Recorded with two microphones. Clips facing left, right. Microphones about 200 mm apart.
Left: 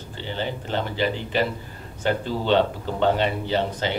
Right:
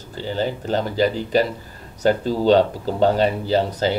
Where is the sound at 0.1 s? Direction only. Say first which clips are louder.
Right 6 dB; 40° right (ahead or behind).